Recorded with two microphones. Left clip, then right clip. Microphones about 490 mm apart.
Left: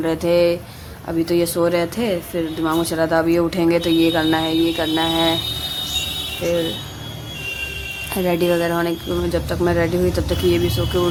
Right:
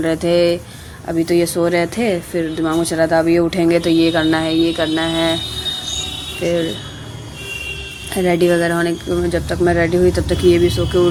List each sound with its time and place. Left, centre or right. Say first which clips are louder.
0.0 s speech: right 2 dB; left
8.1 s speech: right 4 dB; left